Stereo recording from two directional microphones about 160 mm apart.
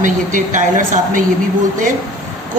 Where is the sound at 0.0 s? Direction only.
55° right (ahead or behind).